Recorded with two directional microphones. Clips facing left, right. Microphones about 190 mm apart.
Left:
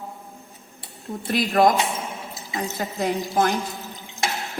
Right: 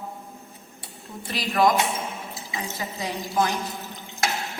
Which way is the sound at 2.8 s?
50° left (ahead or behind).